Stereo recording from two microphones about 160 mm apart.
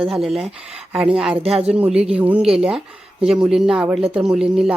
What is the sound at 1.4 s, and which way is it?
Speech, 40° right (ahead or behind).